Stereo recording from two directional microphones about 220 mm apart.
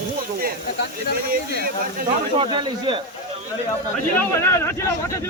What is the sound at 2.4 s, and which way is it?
Speech, 20° right (ahead or behind).